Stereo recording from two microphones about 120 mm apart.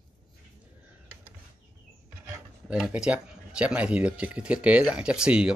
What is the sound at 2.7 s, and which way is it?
Speech, 5° right (ahead or behind).